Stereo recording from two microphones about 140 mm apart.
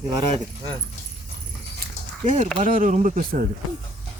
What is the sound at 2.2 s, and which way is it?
Speech, 60° right (ahead or behind).